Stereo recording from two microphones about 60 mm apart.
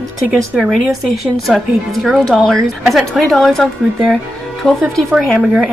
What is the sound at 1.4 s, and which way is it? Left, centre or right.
Speech, centre.